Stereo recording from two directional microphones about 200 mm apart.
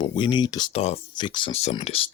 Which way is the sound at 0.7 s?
30° left (ahead or behind).